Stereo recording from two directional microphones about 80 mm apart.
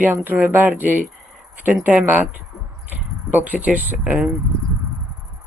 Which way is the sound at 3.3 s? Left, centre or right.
Centre.